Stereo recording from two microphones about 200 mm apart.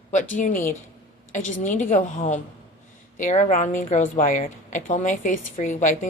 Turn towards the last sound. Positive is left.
turn(degrees=40)  # may be behind; listen again after turning